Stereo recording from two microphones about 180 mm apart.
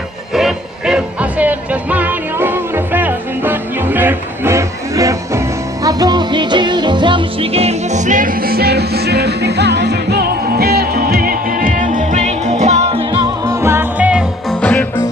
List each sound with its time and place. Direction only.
0.3 s music: 5° right (ahead or behind)
14.6 s music: 10° left (ahead or behind)